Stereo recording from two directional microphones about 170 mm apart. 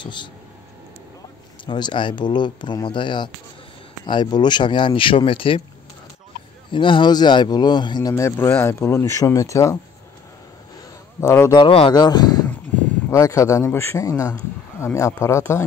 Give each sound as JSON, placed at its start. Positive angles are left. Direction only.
{"t": 0.0, "sound": "speech", "side_deg": 25}
{"t": 1.7, "sound": "speech", "side_deg": 25}
{"t": 6.7, "sound": "speech", "side_deg": 30}
{"t": 8.1, "sound": "speech", "side_deg": 15}
{"t": 11.1, "sound": "speech", "side_deg": 15}
{"t": 11.6, "sound": "speech", "side_deg": 30}